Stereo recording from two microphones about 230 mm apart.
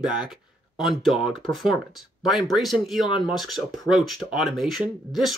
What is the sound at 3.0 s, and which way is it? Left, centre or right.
Speech, left.